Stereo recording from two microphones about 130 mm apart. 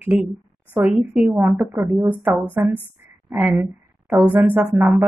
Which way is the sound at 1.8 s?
20° right (ahead or behind).